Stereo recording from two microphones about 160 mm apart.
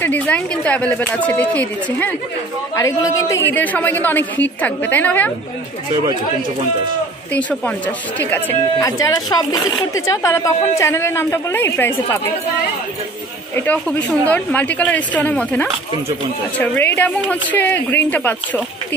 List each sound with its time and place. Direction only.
0.0 s speech: 10° left (ahead or behind)
8.2 s speech: 10° left (ahead or behind)
13.6 s speech: 10° left (ahead or behind)